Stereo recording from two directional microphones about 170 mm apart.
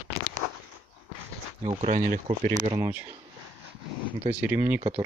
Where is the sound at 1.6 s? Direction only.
35° right (ahead or behind).